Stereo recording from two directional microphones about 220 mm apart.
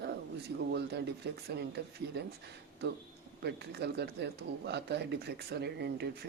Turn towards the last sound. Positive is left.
turn(degrees=-50)  # may be behind; listen again after turning